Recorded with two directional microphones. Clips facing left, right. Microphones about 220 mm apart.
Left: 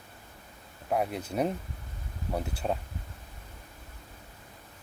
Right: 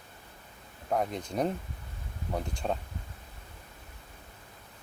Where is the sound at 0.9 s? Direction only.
10° left (ahead or behind).